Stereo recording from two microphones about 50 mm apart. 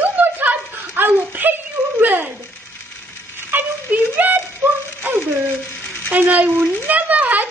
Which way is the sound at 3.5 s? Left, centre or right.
Right.